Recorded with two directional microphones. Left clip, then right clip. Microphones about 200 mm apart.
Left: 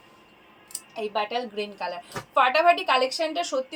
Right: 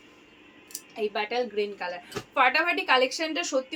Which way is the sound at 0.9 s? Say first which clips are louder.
Even; 20° right (ahead or behind).